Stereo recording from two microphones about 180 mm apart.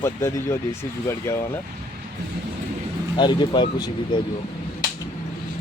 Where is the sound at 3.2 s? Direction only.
25° left (ahead or behind).